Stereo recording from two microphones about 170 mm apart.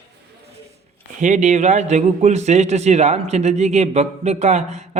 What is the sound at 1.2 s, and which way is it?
A man's voice, 45° right (ahead or behind).